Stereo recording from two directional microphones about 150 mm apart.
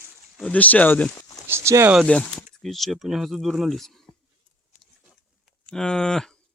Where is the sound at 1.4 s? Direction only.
15° right (ahead or behind).